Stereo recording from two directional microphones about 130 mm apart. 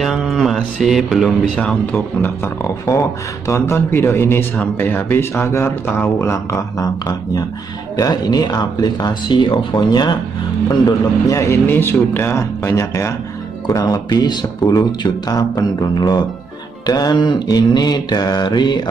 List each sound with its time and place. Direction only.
0.0 s speech: centre (ahead or behind); by 10.1 s 35° left (ahead or behind)
10.9 s speech: 25° left (ahead or behind)